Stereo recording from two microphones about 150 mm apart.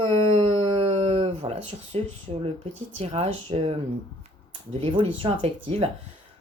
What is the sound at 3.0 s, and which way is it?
Speech, 40° right (ahead or behind).